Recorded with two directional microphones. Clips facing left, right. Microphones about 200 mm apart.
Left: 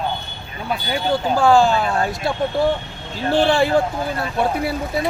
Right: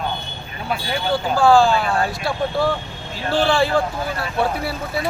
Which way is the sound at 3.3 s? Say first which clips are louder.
Left 2 dB; 20° left (ahead or behind).